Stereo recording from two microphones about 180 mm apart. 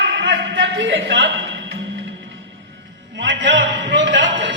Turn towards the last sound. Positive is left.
turn(degrees=-90)